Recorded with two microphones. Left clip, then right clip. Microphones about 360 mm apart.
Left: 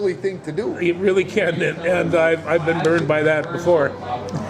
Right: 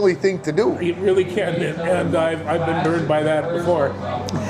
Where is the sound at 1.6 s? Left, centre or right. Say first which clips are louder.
Left 1 dB; left.